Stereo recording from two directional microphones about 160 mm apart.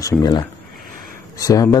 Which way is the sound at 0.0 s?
25° left (ahead or behind).